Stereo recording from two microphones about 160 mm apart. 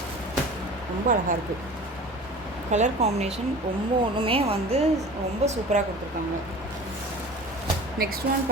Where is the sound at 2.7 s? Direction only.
45° right (ahead or behind).